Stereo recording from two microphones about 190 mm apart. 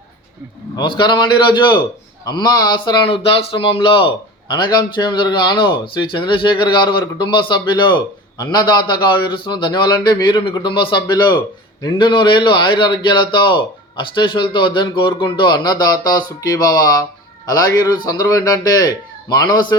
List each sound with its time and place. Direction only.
0.8 s speech: 25° left (ahead or behind)